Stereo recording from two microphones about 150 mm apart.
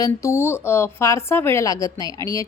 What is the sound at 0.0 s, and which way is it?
A woman's voice, 20° left (ahead or behind).